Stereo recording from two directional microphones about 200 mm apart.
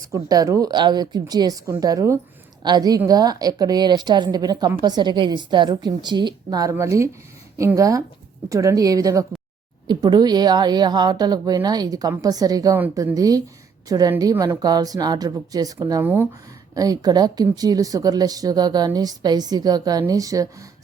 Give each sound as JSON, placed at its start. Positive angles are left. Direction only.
{"t": 0.0, "sound": "a woman's voice", "side_deg": -15}